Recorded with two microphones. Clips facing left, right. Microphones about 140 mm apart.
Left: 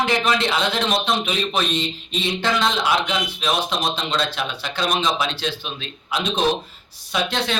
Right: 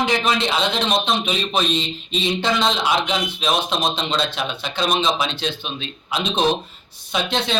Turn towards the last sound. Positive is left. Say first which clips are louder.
# right 1 dB
turn(degrees=-20)  # may be behind; listen again after turning